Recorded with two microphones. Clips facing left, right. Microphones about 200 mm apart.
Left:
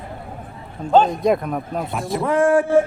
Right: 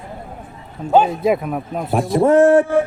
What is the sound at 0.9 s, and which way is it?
A man's voice, 10° right (ahead or behind).